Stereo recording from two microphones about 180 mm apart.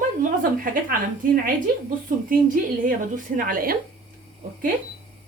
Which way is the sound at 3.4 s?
55° right (ahead or behind).